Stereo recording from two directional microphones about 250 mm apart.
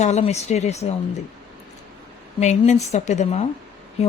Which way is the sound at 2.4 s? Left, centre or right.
Left.